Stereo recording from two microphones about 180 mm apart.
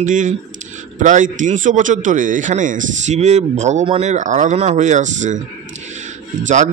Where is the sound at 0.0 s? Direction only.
45° right (ahead or behind).